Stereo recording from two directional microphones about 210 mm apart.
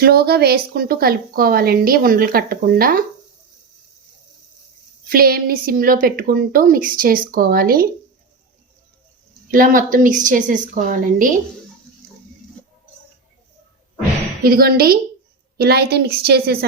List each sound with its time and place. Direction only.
0.0 s speech: 45° right (ahead or behind)
5.0 s speech: 45° right (ahead or behind)
9.5 s a woman's voice: 40° right (ahead or behind)
14.4 s speech: 45° right (ahead or behind)